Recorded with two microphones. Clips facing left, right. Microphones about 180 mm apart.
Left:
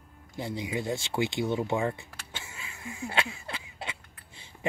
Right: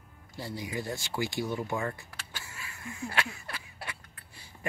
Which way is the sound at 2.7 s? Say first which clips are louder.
Left 3 dB; 15° left (ahead or behind).